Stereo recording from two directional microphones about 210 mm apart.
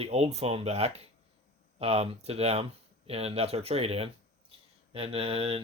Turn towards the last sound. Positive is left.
turn(degrees=-25)  # may be behind; listen again after turning